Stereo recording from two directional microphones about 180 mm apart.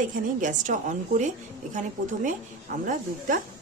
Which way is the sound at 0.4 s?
45° right (ahead or behind).